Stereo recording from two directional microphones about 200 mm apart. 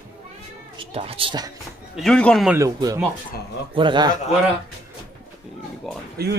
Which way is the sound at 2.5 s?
15° right (ahead or behind).